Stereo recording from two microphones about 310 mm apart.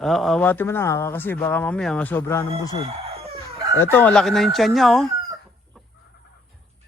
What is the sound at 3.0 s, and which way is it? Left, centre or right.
Chicken, centre.